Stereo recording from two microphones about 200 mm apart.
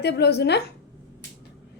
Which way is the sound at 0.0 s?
55° left (ahead or behind).